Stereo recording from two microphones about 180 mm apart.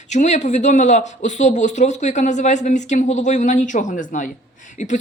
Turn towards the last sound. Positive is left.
turn(degrees=40)  # may be behind; listen again after turning